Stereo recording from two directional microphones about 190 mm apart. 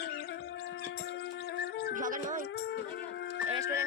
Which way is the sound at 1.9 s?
45° right (ahead or behind).